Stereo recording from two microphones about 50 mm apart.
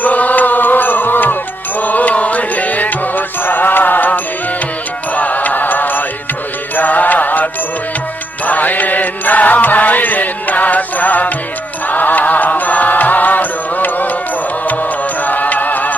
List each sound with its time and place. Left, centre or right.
0.0 s music: left
8.4 s music: left
15.2 s music: left